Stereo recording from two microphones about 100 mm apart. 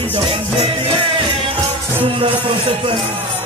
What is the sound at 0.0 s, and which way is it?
Music, 65° right (ahead or behind).